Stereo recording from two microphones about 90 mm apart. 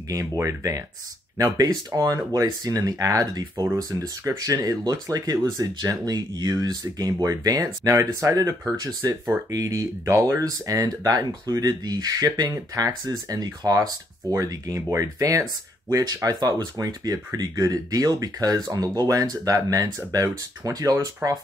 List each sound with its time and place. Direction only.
0.1 s speech: 40° right (ahead or behind)
3.7 s speech: 35° right (ahead or behind)